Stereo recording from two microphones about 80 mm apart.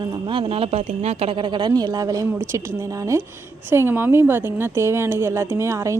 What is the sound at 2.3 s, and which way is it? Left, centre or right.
Speech, right.